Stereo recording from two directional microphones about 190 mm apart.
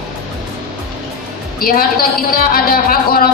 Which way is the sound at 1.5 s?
50° left (ahead or behind).